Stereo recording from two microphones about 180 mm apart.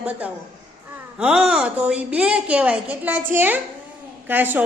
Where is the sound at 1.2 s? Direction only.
5° right (ahead or behind).